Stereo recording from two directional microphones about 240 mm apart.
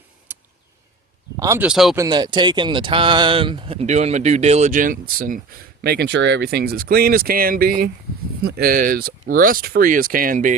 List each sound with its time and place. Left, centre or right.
0.3 s a sound: centre
1.4 s speech: centre
2.0 s speech: centre; by 10.5 s right